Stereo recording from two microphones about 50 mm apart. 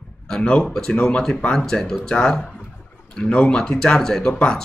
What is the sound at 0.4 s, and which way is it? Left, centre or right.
Speech, left.